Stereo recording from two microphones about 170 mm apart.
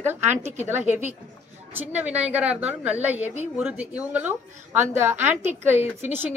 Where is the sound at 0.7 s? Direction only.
10° right (ahead or behind).